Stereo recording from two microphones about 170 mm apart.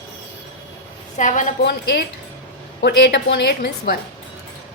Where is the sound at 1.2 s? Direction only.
45° left (ahead or behind).